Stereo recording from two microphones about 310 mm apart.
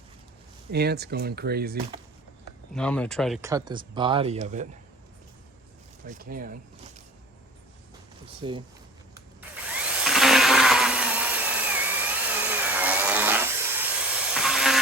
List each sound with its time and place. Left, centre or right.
0.7 s speech: right
2.7 s speech: centre; by 4.7 s right
6.1 s speech: right
8.4 s speech: centre
9.6 s tools: centre